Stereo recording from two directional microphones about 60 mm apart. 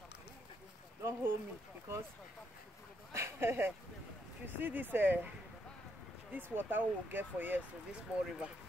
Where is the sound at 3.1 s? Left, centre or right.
Right.